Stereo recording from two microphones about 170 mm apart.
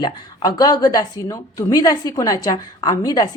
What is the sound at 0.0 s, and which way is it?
A woman's voice, 25° left (ahead or behind).